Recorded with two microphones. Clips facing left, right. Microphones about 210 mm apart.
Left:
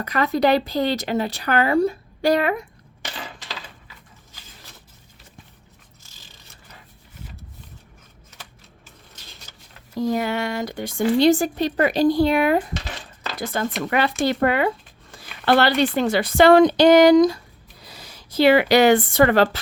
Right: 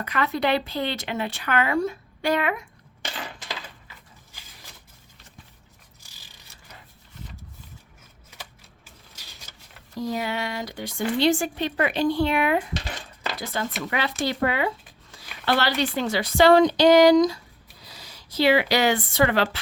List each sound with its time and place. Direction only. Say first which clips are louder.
0.0 s speech: left 5 dB; 40° left (ahead or behind)
10.0 s speech: left 5 dB; 50° left (ahead or behind)
13.4 s speech: left 6 dB; 50° left (ahead or behind)